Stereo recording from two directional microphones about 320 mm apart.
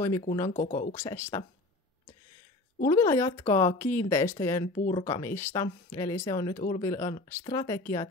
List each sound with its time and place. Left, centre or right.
0.5 s speech: left
0.9 s speech: centre
2.8 s speech: centre
4.7 s speech: left
5.0 s speech: centre